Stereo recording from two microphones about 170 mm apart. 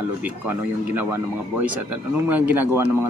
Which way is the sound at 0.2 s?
10° right (ahead or behind).